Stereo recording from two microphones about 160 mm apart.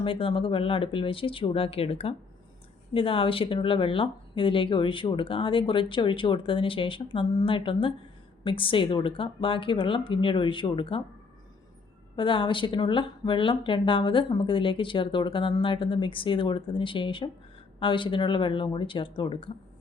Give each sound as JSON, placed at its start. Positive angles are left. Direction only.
{"t": 0.0, "sound": "speech", "side_deg": 35}
{"t": 12.1, "sound": "speech", "side_deg": 30}